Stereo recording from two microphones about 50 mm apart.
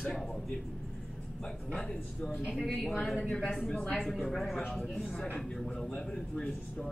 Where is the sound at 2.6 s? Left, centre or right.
Centre.